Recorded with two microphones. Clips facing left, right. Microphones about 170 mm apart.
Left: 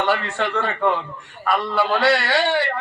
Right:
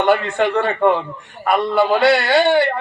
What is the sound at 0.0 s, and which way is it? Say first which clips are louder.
A man's voice: right 6 dB; 15° right (ahead or behind).